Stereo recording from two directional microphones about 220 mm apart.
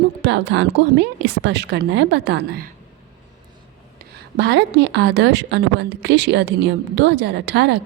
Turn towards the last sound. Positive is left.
turn(degrees=-50)  # may be behind; listen again after turning